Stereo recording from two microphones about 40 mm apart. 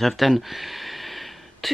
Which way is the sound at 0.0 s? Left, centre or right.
Centre.